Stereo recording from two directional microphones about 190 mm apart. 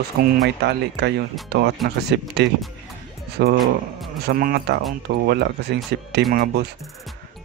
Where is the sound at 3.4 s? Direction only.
55° right (ahead or behind).